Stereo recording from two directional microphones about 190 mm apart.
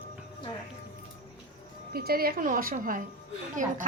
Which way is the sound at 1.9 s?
55° right (ahead or behind).